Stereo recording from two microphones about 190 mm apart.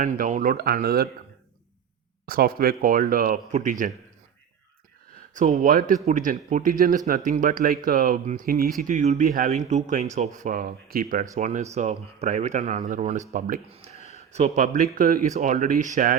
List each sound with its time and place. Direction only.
0.0 s speech: 45° right (ahead or behind)
2.2 s speech: 50° right (ahead or behind)
5.3 s speech: 40° right (ahead or behind)
8.8 s speech: 40° right (ahead or behind)
13.7 s a sound: 30° right (ahead or behind)
14.0 s a sound: 35° left (ahead or behind)
14.3 s speech: 40° right (ahead or behind)